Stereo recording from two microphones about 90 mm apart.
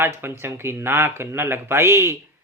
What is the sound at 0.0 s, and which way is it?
Speech, 25° right (ahead or behind).